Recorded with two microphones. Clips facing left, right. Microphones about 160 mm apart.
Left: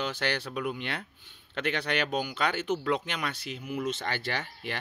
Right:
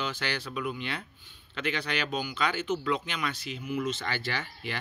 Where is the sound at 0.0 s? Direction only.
60° left (ahead or behind).